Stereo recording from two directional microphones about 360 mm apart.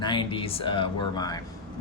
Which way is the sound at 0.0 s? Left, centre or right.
Centre.